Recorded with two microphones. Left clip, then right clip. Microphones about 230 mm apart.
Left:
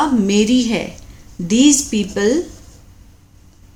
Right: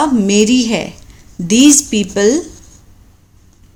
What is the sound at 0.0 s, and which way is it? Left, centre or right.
Speech, right.